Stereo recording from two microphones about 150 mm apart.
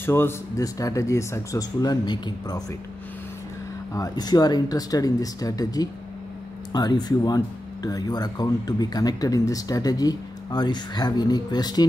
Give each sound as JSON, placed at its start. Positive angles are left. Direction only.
{"t": 0.0, "sound": "speech", "side_deg": 15}
{"t": 3.9, "sound": "speech", "side_deg": 25}